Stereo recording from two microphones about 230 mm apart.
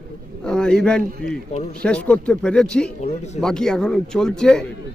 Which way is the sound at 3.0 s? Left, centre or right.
Left.